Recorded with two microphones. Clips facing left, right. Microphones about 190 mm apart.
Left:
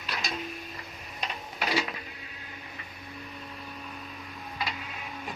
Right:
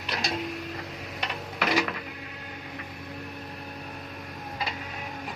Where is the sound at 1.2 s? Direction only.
70° right (ahead or behind).